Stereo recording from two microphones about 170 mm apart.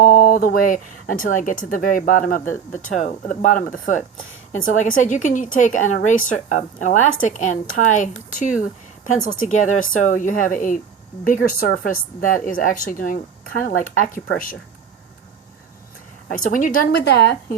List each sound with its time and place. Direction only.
0.0 s a woman's voice: 55° left (ahead or behind)
9.5 s a woman's voice: 50° left (ahead or behind)
16.5 s a woman's voice: 55° left (ahead or behind)
16.9 s a woman's voice: 75° left (ahead or behind)